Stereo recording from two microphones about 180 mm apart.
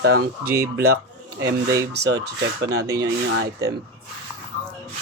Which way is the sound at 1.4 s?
15° right (ahead or behind).